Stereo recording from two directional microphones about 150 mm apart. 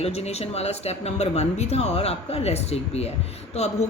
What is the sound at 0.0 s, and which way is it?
A woman's voice, 45° left (ahead or behind).